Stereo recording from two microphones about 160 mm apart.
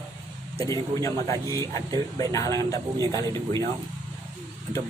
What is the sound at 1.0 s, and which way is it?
A man's voice, 20° left (ahead or behind).